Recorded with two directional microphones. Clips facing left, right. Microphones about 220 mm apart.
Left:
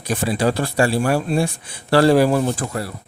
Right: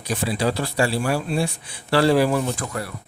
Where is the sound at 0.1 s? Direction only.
50° left (ahead or behind).